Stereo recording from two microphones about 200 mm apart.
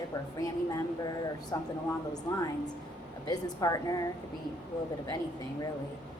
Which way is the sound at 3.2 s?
20° left (ahead or behind).